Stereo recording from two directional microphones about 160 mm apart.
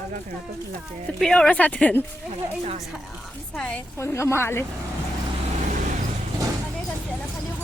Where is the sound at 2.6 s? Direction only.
40° right (ahead or behind).